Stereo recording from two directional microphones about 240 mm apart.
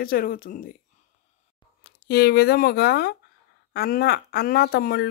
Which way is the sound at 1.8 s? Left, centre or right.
Left.